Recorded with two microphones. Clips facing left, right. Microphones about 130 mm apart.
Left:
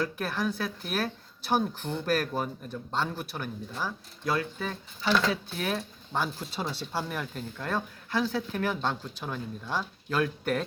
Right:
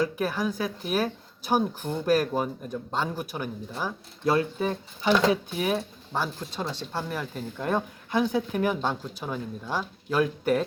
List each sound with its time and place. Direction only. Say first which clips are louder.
0.0 s speech: right 4 dB; 10° right (ahead or behind)
4.2 s speech: right 6 dB; 25° right (ahead or behind); by 6.3 s 5° right (ahead or behind)
6.4 s speech: right 1 dB; 10° left (ahead or behind)
7.1 s speech: right 2 dB; 5° right (ahead or behind)
7.6 s speech: right 5 dB; 20° right (ahead or behind)